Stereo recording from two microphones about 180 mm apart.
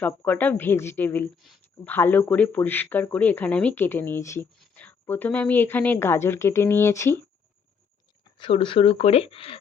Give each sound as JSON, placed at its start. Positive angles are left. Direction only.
{"t": 0.0, "sound": "speech", "side_deg": 10}
{"t": 1.4, "sound": "speech", "side_deg": 0}
{"t": 8.2, "sound": "speech", "side_deg": 30}